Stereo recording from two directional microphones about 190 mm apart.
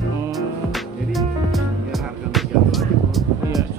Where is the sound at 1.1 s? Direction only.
Centre (ahead or behind).